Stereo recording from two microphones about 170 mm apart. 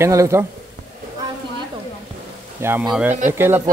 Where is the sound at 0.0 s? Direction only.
15° right (ahead or behind).